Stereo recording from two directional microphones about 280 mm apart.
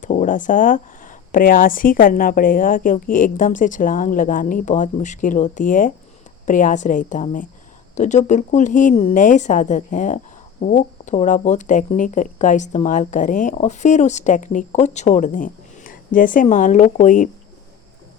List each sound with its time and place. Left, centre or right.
0.0 s speech: left